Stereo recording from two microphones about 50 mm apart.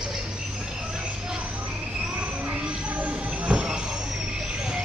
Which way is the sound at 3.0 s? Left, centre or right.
Right.